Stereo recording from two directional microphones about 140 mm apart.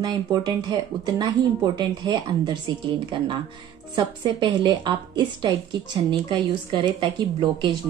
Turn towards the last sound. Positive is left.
turn(degrees=-35)  # may be behind; listen again after turning